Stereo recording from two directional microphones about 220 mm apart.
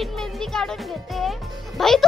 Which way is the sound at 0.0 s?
Centre (ahead or behind).